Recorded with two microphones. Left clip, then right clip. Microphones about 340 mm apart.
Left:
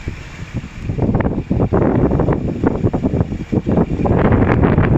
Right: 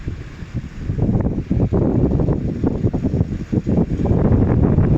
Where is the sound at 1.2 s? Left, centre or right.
Left.